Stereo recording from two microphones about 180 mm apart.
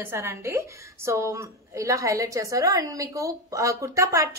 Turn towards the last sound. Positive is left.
turn(degrees=-15)  # may be behind; listen again after turning